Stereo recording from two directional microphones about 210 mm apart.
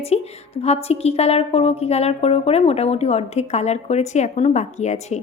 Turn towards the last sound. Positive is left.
turn(degrees=35)  # may be behind; listen again after turning